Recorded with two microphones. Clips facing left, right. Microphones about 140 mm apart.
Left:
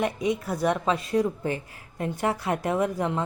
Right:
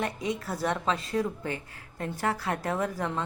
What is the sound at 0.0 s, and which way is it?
A woman's voice, 20° left (ahead or behind).